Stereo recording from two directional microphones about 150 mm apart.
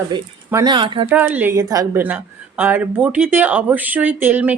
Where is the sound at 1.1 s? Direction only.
10° right (ahead or behind).